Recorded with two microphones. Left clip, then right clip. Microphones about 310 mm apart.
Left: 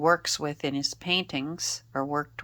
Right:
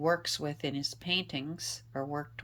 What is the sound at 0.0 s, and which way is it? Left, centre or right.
Speech, centre.